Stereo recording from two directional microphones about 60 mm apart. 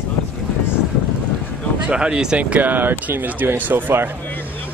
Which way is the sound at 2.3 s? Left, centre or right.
Right.